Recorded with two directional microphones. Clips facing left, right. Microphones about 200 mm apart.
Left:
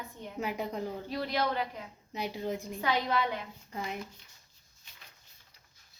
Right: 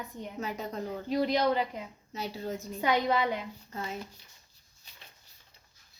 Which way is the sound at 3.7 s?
15° left (ahead or behind).